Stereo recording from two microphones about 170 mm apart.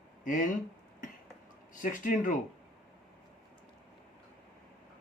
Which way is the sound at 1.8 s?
50° left (ahead or behind).